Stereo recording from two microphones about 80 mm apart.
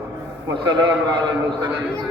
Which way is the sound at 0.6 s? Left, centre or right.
Right.